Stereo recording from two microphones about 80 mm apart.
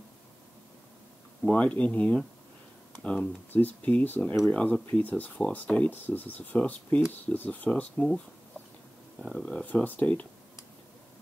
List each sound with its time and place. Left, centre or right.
1.5 s speech: centre
9.2 s speech: centre
9.7 s speech: centre